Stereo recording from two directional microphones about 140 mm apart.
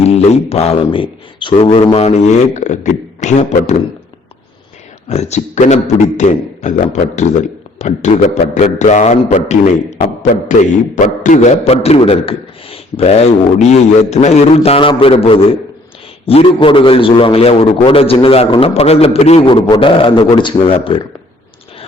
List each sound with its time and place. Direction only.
0.0 s mantra: 50° left (ahead or behind)
0.5 s a man's voice: 45° left (ahead or behind)
5.0 s a man's voice: 50° left (ahead or behind); by 20.7 s 35° left (ahead or behind)